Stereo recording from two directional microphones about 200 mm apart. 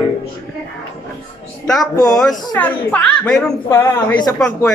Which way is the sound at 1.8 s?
20° left (ahead or behind).